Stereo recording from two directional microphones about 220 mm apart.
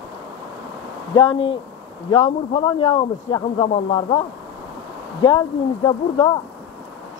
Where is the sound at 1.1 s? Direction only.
20° left (ahead or behind).